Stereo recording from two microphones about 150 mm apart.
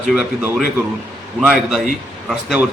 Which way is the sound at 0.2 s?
5° right (ahead or behind).